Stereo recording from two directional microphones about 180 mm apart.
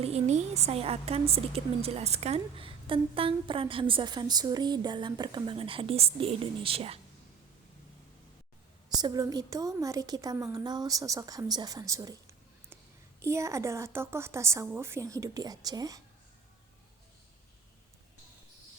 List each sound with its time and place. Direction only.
0.0 s a woman's voice: 35° right (ahead or behind)
9.0 s a woman's voice: 20° right (ahead or behind)
13.2 s a woman's voice: 15° right (ahead or behind)